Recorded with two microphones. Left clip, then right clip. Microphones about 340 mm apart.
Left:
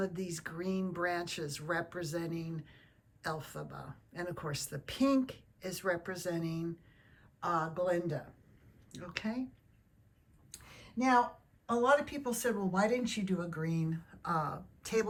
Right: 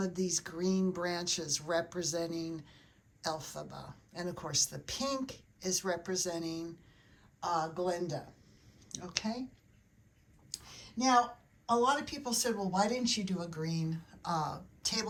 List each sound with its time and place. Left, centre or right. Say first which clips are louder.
0.0 s speech: right 3 dB; centre
10.5 s a sound: right 2 dB; centre
11.7 s speech: left 1 dB; centre